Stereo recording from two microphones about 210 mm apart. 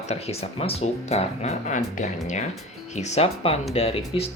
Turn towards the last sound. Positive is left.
turn(degrees=30)  # may be behind; listen again after turning